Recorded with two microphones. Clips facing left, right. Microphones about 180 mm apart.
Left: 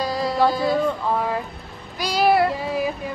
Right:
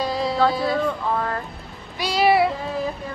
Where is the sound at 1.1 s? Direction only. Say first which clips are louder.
Left 2 dB; 10° left (ahead or behind).